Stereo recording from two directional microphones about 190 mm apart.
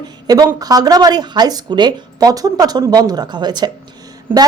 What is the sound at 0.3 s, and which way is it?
Speech, 20° right (ahead or behind).